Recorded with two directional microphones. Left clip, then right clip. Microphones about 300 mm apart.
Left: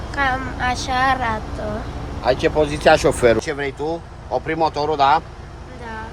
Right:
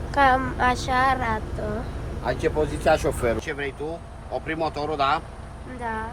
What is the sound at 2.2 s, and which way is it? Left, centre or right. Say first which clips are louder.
Speech: left 7 dB; left.